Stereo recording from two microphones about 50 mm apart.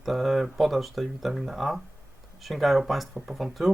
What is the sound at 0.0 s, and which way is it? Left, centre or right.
Speech, centre.